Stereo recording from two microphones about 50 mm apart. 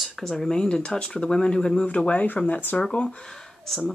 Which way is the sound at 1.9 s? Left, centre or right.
Left.